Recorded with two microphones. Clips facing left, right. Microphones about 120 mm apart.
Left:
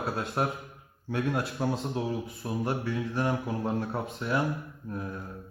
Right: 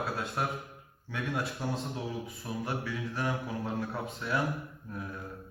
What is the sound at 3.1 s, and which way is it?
Speech, 25° left (ahead or behind).